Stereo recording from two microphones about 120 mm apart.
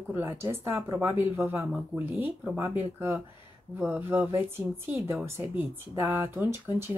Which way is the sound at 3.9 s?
15° right (ahead or behind).